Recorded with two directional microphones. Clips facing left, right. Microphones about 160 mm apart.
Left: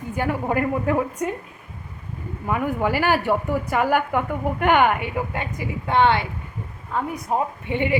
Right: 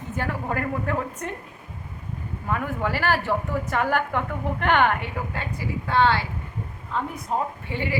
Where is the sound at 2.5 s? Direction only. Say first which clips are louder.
Left 4 dB; 15° left (ahead or behind).